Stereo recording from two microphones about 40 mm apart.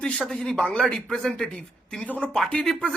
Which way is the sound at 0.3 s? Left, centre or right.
Centre.